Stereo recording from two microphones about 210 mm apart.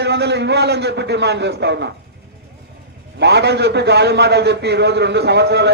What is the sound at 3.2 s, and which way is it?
A man's voice, 55° right (ahead or behind).